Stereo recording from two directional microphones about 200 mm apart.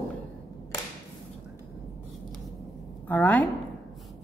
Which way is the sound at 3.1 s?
10° left (ahead or behind).